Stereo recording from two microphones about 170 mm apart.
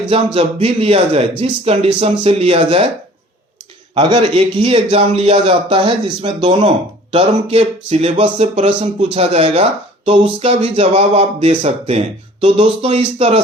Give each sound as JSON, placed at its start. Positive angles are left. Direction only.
{"t": 0.3, "sound": "speech", "side_deg": -35}
{"t": 3.9, "sound": "speech", "side_deg": -30}